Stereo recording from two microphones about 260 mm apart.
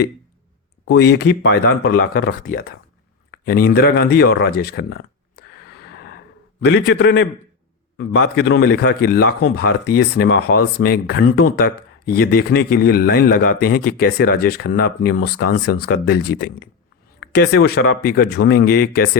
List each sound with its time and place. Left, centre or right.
0.9 s a man's voice: left
5.4 s gasp: left
6.7 s a man's voice: left